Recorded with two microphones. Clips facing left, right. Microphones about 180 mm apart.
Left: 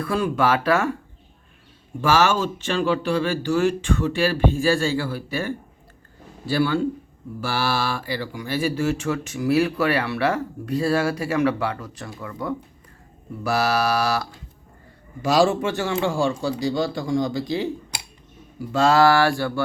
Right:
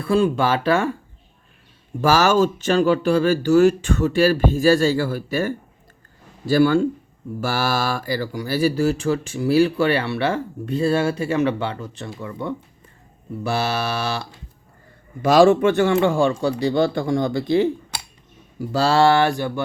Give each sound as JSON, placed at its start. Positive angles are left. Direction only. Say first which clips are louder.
{"t": 0.0, "sound": "speech", "louder": "right 3 dB", "side_deg": -25}
{"t": 2.0, "sound": "speech", "louder": "right 3 dB", "side_deg": -40}
{"t": 15.2, "sound": "speech", "louder": "right 5 dB", "side_deg": -55}
{"t": 18.6, "sound": "speech", "louder": "even", "side_deg": -35}